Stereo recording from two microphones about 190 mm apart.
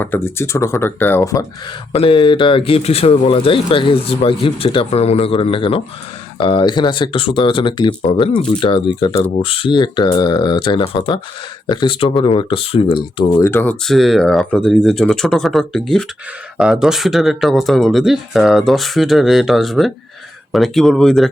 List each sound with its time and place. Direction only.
0.0 s speech: 10° left (ahead or behind)
9.4 s speech: 30° left (ahead or behind)
13.4 s speech: 10° left (ahead or behind)